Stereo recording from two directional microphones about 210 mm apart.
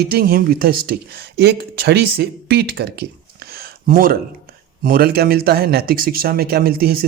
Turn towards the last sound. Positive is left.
turn(degrees=-45)  # may be behind; listen again after turning